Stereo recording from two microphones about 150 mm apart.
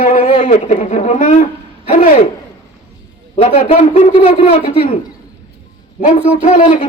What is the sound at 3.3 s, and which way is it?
A man's voice, 45° left (ahead or behind).